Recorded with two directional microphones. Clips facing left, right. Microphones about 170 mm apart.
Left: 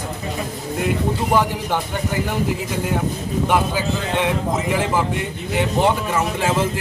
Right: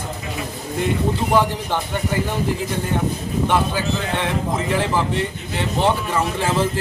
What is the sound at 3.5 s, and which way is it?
A man's voice, 15° left (ahead or behind).